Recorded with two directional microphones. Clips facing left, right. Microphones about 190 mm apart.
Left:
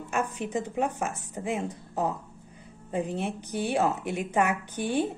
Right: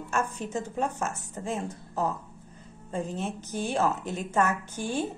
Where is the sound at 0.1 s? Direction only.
15° left (ahead or behind).